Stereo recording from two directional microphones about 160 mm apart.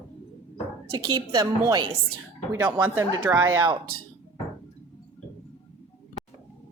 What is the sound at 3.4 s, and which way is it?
Speech, 25° right (ahead or behind).